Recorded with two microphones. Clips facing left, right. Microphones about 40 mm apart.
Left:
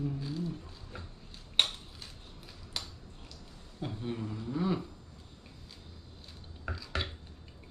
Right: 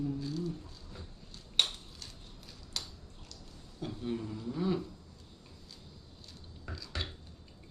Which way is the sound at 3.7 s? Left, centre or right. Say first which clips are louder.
Even; centre.